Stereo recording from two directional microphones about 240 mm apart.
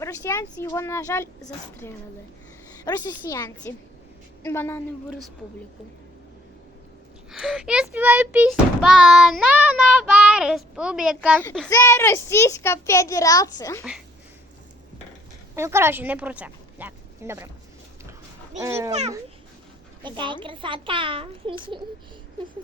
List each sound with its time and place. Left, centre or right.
0.0 s a child's voice: centre
7.3 s speech: centre
11.7 s a child's voice: centre
15.5 s speech: centre
18.6 s speech: centre
20.0 s a child's voice: centre